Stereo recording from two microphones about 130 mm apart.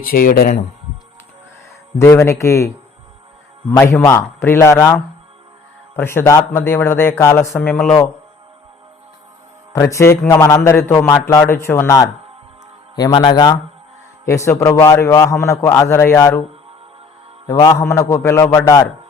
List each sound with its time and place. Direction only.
0.0 s speech: 90° left
2.0 s speech: 20° left (ahead or behind)
6.0 s a man's voice: 20° left (ahead or behind)
9.7 s speech: 20° left (ahead or behind)
13.0 s a man's voice: 35° left (ahead or behind)
14.3 s speech: 20° left (ahead or behind)
17.5 s speech: 25° left (ahead or behind)